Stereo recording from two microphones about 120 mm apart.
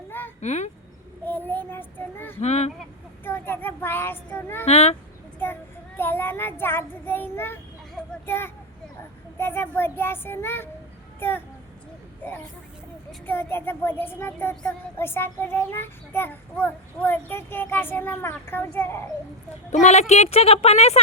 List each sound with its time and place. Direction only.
0.3 s speech: 75° left (ahead or behind)
1.2 s a child's voice: 15° left (ahead or behind)
2.4 s a woman's voice: 65° left (ahead or behind)
3.2 s a child's voice: 15° left (ahead or behind)
4.6 s a woman's voice: 60° left (ahead or behind)
6.0 s a child's voice: 20° left (ahead or behind)
8.3 s child singing: 20° left (ahead or behind)
11.2 s a child's voice: 15° left (ahead or behind)
13.2 s a child's voice: 15° left (ahead or behind)
19.7 s a woman's voice: 70° left (ahead or behind)